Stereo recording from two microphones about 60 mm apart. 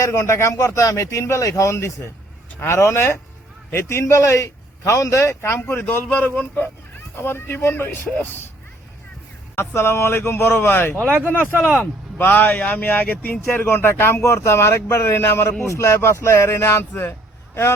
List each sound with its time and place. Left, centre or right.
0.0 s a man's voice: left
5.6 s speech: left
6.1 s a man's voice: left
7.2 s speech: left
9.6 s speech: left
12.1 s a man's voice: left
14.2 s a man's voice: left
15.6 s a man's voice: left
17.0 s vehicle: left